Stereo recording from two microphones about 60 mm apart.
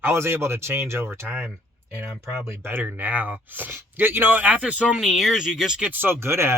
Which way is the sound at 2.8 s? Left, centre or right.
Right.